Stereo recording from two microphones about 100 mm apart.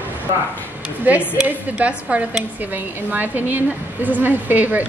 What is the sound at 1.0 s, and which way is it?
A woman's voice, 15° right (ahead or behind).